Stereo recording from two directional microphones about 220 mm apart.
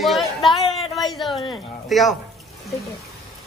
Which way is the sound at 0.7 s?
20° left (ahead or behind).